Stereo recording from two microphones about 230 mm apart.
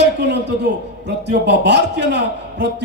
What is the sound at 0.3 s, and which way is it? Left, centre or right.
A man's voice, right.